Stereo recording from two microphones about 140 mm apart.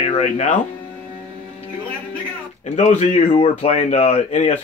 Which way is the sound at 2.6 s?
55° left (ahead or behind).